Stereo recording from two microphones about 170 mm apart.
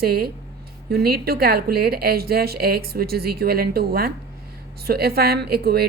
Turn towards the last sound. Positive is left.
turn(degrees=-65)  # may be behind; listen again after turning